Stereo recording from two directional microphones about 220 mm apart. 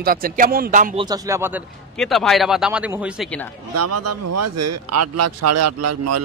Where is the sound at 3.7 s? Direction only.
90° right.